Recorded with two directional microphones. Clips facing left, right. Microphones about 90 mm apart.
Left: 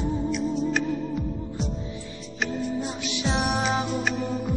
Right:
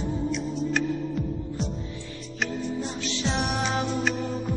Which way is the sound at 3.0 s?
15° left (ahead or behind).